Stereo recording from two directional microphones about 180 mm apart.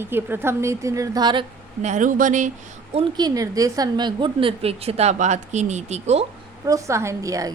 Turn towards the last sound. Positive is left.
turn(degrees=-20)  # may be behind; listen again after turning